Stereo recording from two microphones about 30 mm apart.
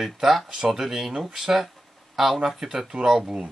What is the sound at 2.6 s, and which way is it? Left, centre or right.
Speech, centre.